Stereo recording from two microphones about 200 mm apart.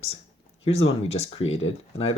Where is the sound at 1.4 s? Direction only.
80° left.